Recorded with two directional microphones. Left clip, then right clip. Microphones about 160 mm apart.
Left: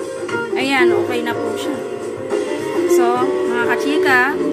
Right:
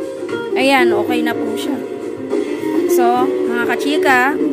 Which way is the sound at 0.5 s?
75° right (ahead or behind).